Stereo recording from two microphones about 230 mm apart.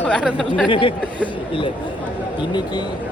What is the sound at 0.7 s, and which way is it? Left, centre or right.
Speech, left.